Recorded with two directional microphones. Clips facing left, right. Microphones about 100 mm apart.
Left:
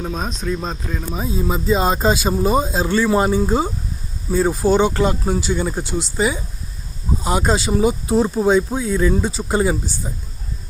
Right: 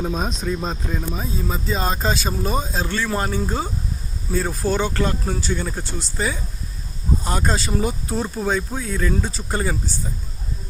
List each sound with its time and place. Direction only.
0.0 s speech: 5° right (ahead or behind)
1.1 s speech: 10° left (ahead or behind)
8.1 s speech: 25° left (ahead or behind)
9.0 s speech: 10° left (ahead or behind)